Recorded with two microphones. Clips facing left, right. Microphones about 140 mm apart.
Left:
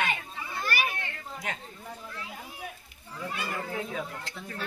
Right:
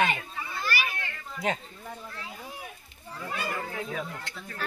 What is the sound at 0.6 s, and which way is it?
Children playing, 50° left (ahead or behind).